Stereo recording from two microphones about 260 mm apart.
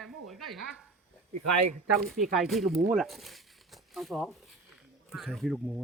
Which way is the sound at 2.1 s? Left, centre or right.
Centre.